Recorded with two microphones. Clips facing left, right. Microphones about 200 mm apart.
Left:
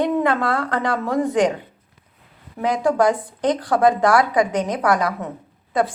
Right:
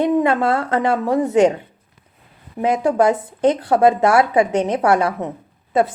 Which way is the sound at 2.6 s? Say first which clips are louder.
Right 2 dB; 25° right (ahead or behind).